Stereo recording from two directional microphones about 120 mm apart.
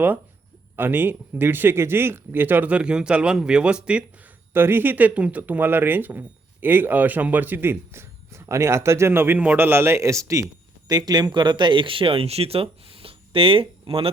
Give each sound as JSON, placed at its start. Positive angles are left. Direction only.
{"t": 0.8, "sound": "speech", "side_deg": -15}